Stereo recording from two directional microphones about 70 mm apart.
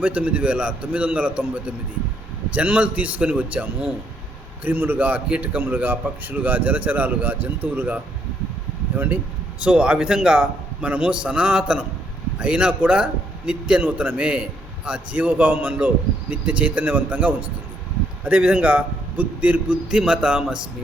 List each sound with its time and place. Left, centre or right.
0.0 s a man's voice: centre
9.6 s a man's voice: centre